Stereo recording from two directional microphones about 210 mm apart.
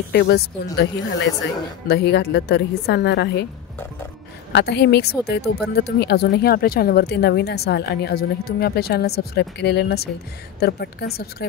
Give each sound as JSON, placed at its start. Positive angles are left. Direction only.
{"t": 0.1, "sound": "speech", "side_deg": 50}
{"t": 1.4, "sound": "speech", "side_deg": 50}
{"t": 4.5, "sound": "speech", "side_deg": 55}